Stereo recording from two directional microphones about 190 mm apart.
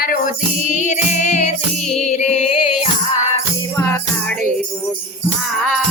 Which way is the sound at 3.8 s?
10° left (ahead or behind).